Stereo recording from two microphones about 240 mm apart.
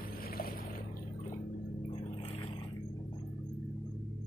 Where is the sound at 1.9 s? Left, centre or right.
Left.